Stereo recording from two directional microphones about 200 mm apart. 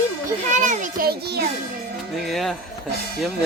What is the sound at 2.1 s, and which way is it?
Speech, centre (ahead or behind).